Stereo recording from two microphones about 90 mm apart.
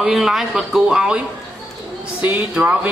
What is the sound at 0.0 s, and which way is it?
Speech, 5° right (ahead or behind).